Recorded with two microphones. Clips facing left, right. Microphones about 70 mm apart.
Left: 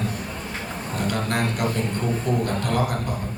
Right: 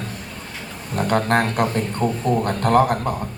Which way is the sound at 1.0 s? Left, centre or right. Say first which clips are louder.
Right 7 dB; right.